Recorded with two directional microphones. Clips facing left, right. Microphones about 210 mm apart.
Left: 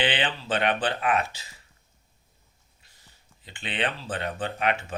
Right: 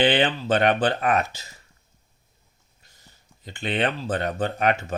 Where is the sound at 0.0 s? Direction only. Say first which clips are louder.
Right 7 dB; 40° right (ahead or behind).